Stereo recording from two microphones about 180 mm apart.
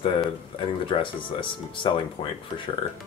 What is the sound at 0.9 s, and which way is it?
Speech, 30° left (ahead or behind).